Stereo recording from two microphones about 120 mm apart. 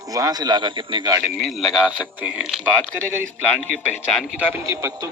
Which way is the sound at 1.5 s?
Centre (ahead or behind).